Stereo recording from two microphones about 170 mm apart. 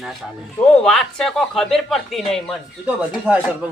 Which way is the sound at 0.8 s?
5° left (ahead or behind).